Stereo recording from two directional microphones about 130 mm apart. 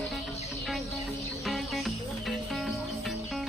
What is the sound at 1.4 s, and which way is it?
Music, centre (ahead or behind).